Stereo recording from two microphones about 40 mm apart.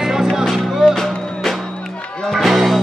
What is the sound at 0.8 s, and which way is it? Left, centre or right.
Music, centre.